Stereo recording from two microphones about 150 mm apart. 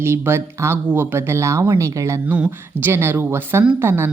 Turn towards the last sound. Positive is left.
turn(degrees=-15)  # may be behind; listen again after turning